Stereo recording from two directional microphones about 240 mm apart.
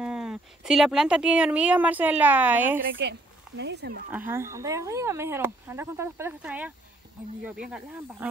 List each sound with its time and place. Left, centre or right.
0.0 s speech: centre
2.8 s speech: right
4.3 s speech: centre